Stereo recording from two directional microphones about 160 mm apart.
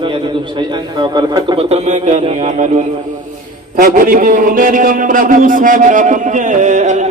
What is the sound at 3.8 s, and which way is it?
A man's voice, 60° right (ahead or behind).